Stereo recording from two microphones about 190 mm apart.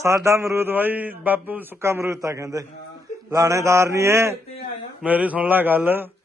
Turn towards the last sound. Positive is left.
turn(degrees=-10)  # may be behind; listen again after turning